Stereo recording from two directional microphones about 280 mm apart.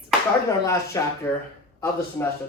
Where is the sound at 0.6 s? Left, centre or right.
Centre.